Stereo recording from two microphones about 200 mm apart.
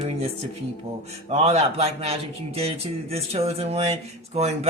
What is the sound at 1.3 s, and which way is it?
Speech, 30° right (ahead or behind).